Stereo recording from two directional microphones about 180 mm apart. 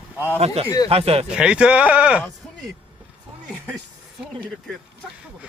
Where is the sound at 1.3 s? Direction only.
5° right (ahead or behind).